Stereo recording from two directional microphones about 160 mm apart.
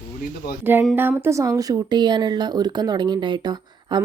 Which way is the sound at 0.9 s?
10° right (ahead or behind).